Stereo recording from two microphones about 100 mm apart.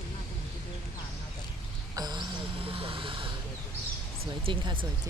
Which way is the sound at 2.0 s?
45° right (ahead or behind).